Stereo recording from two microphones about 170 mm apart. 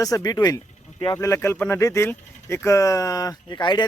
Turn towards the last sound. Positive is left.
turn(degrees=25)  # may be behind; listen again after turning